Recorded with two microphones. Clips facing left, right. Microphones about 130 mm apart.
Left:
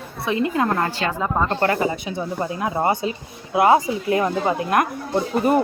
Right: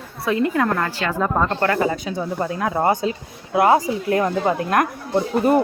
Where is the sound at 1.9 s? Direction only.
45° right (ahead or behind).